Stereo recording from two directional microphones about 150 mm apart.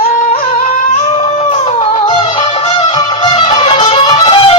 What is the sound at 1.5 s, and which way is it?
Music, 45° left (ahead or behind).